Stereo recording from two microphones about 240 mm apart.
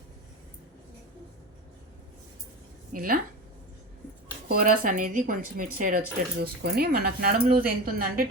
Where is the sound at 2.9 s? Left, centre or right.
Right.